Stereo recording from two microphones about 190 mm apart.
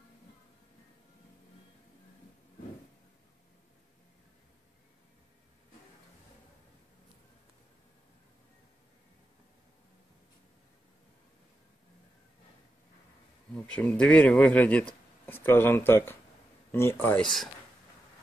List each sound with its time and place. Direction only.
13.7 s speech: 5° left (ahead or behind)